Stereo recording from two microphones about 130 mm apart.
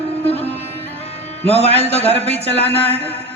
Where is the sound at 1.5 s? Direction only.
50° left (ahead or behind).